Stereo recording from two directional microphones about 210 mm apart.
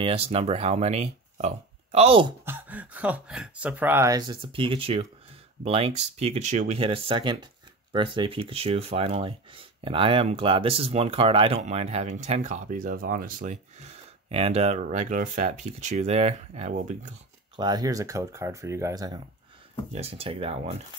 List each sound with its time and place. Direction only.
0.0 s speech: 25° right (ahead or behind)
2.4 s speech: 10° right (ahead or behind); by 17.1 s 35° right (ahead or behind)
17.6 s speech: 20° right (ahead or behind)
19.9 s speech: 30° right (ahead or behind)